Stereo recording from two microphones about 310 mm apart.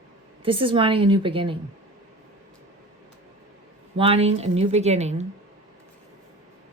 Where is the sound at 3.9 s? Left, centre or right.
Centre.